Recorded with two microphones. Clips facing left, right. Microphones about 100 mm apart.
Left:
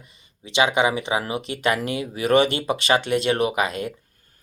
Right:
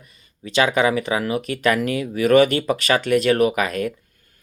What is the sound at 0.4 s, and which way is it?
Speech, 20° left (ahead or behind).